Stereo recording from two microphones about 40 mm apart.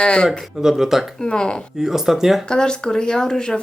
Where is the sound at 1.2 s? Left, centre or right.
Centre.